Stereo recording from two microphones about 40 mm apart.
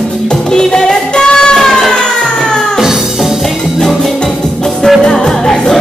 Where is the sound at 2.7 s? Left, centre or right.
Centre.